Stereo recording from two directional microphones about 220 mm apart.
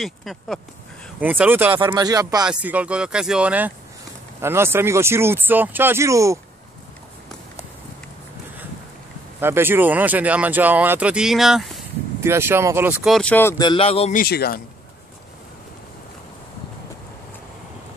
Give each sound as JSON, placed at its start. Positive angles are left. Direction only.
{"t": 0.0, "sound": "speech", "side_deg": 0}
{"t": 2.4, "sound": "speech", "side_deg": -5}
{"t": 9.4, "sound": "speech", "side_deg": -10}
{"t": 12.2, "sound": "speech", "side_deg": -10}
{"t": 14.1, "sound": "speech", "side_deg": 45}